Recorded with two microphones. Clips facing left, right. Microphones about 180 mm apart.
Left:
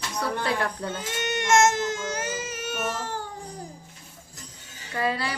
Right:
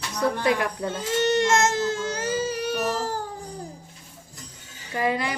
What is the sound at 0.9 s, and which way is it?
Speech, 30° right (ahead or behind).